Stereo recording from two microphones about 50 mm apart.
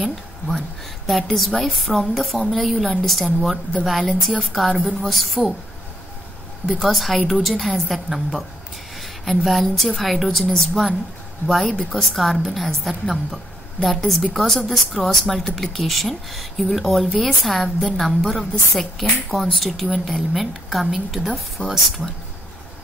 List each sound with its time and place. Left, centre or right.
1.0 s a woman's voice: centre
6.8 s a woman's voice: centre
8.9 s a sound: centre
9.4 s a woman's voice: centre
21.6 s speech: right